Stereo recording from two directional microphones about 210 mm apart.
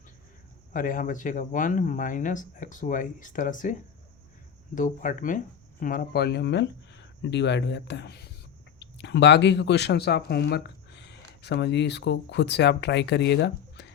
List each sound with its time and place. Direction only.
0.7 s speech: 40° left (ahead or behind)